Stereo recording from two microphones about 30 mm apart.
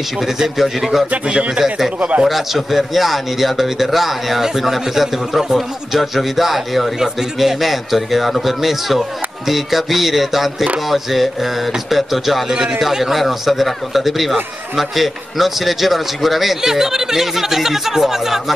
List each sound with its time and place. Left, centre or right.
0.6 s speech: centre
2.0 s speech: right
2.2 s a man's voice: centre